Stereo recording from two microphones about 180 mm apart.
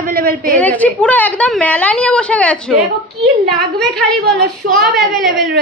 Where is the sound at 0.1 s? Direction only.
55° right (ahead or behind).